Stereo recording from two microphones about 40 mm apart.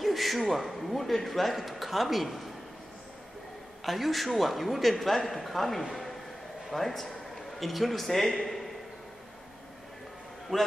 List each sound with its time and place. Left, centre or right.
0.0 s a man's voice: centre
3.8 s a man's voice: centre
10.5 s a man's voice: centre